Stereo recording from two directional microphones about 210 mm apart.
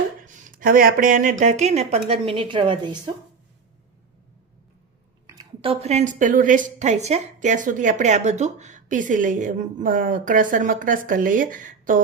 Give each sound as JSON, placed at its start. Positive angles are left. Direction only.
{"t": 0.2, "sound": "a woman's voice", "side_deg": -40}
{"t": 5.2, "sound": "a sound", "side_deg": -20}
{"t": 5.8, "sound": "a woman's voice", "side_deg": -30}